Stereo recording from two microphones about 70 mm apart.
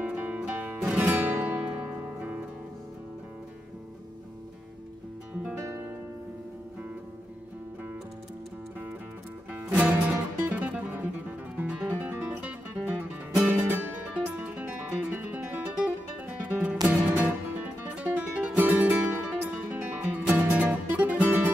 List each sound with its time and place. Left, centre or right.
0.0 s music: centre
9.5 s music: centre